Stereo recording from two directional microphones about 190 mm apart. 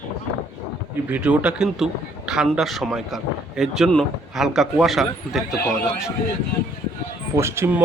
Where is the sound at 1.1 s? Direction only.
5° right (ahead or behind).